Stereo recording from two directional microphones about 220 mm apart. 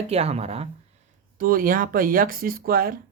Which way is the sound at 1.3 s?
40° right (ahead or behind).